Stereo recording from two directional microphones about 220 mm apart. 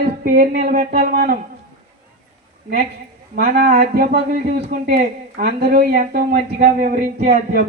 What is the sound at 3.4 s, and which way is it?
Speech, 45° right (ahead or behind).